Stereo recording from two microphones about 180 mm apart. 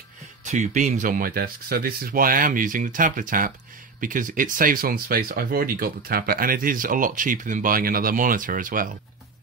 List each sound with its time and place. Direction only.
0.5 s speech: 40° right (ahead or behind)